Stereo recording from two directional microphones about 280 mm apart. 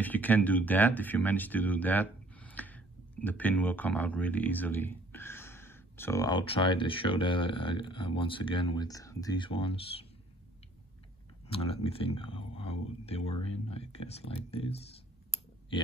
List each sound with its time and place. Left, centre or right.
0.0 s speech: centre
11.4 s speech: centre